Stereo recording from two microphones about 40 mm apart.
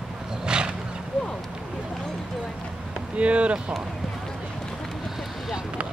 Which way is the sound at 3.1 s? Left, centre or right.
Right.